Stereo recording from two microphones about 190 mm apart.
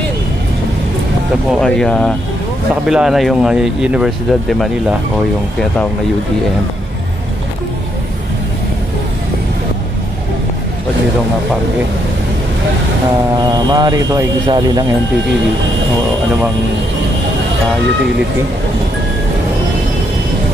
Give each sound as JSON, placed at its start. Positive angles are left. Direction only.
{"t": 1.5, "sound": "speech", "side_deg": 5}
{"t": 13.4, "sound": "speech", "side_deg": -20}